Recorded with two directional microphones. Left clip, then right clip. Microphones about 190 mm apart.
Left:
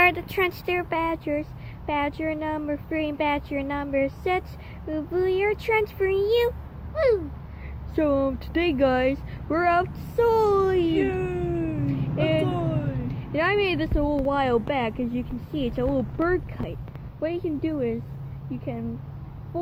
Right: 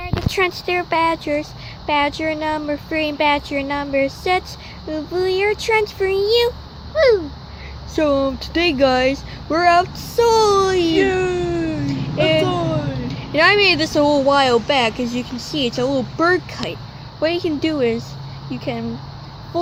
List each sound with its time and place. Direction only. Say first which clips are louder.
0.0 s a child's voice: even; 5° right (ahead or behind)
6.9 s a sound: right 8 dB; 25° right (ahead or behind)
7.9 s a child's voice: right 6 dB; 5° right (ahead or behind)
10.9 s cat: right 8 dB; 25° right (ahead or behind)
11.9 s a sound: right 8 dB; 5° right (ahead or behind)
13.3 s a child's voice: right 10 dB; 10° right (ahead or behind)